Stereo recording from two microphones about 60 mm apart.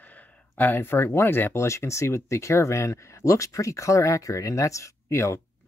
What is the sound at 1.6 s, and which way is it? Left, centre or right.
Speech, left.